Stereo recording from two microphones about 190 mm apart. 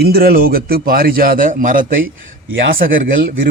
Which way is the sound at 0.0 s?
55° right (ahead or behind).